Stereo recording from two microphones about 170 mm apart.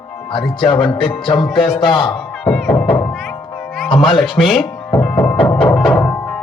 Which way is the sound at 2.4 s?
5° left (ahead or behind).